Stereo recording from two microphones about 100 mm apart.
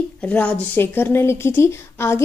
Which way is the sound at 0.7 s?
25° left (ahead or behind).